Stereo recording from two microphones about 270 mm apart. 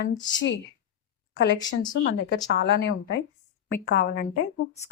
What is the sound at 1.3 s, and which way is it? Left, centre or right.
A woman's voice, left.